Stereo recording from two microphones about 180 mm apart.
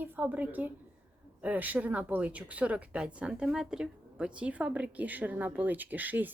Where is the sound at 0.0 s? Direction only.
10° right (ahead or behind).